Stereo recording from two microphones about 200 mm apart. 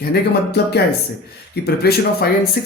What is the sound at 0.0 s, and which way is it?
Speech, 55° left (ahead or behind).